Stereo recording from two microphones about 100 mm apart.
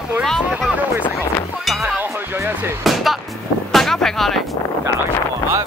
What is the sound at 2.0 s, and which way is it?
Speech, 25° right (ahead or behind).